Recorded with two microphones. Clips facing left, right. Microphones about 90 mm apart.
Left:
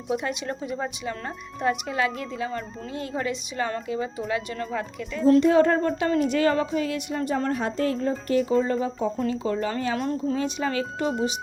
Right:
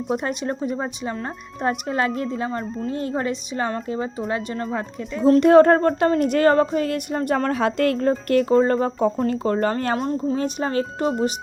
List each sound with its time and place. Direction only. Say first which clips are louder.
0.1 s a woman's voice: right 2 dB; 40° right (ahead or behind)
0.8 s speech: right 3 dB; 25° right (ahead or behind)
1.6 s a woman's voice: right 2 dB; 40° right (ahead or behind)
5.4 s a sound: right 6 dB; 55° right (ahead or behind)
7.3 s a woman's voice: right 5 dB; 90° right
8.3 s a sound: right 5 dB; 50° right (ahead or behind)
10.3 s a woman's voice: right 3 dB; 40° right (ahead or behind)